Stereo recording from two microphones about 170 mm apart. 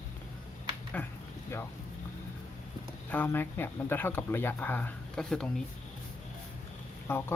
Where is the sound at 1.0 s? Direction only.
10° left (ahead or behind).